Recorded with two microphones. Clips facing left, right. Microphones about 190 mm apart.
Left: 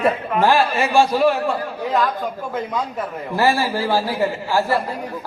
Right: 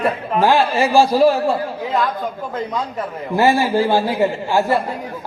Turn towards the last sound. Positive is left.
turn(degrees=-20)  # may be behind; listen again after turning